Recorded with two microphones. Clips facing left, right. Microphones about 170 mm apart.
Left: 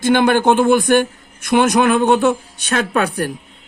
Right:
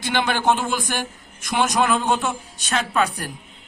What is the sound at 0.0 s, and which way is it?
A man's voice, 50° left (ahead or behind).